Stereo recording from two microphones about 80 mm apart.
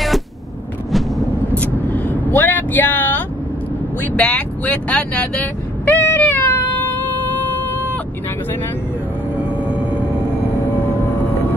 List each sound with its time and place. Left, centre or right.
1.5 s vehicle: left
4.2 s speech: centre
5.9 s meow: left
10.4 s music: left